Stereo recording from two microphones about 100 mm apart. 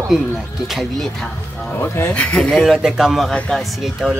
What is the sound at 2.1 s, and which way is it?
Speech, 10° left (ahead or behind).